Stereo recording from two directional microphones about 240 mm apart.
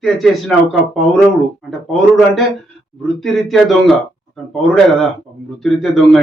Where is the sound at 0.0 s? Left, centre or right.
Centre.